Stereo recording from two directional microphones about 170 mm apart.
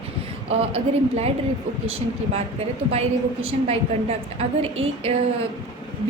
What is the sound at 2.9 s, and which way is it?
A woman's voice, 35° right (ahead or behind).